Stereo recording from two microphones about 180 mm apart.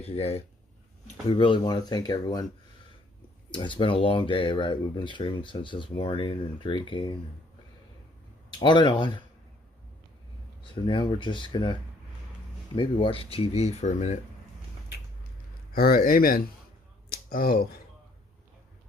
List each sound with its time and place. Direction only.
0.0 s speech: 35° left (ahead or behind)
3.5 s speech: 25° left (ahead or behind)
8.5 s speech: 25° left (ahead or behind)
10.8 s speech: 25° left (ahead or behind)
15.7 s speech: 55° left (ahead or behind)
17.1 s a sound: 55° left (ahead or behind)